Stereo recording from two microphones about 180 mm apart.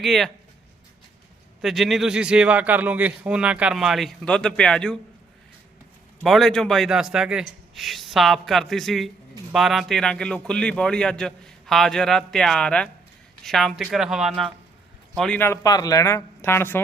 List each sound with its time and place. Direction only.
0.0 s a man's voice: centre (ahead or behind)
1.6 s a man's voice: centre (ahead or behind)
6.2 s a man's voice: centre (ahead or behind)